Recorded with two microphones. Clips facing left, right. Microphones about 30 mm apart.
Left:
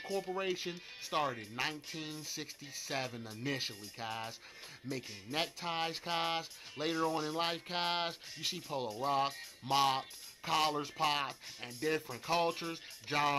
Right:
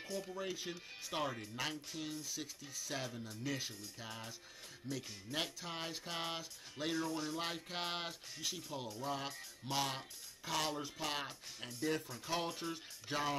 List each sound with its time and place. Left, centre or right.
0.0 s speech: left
0.3 s speech: left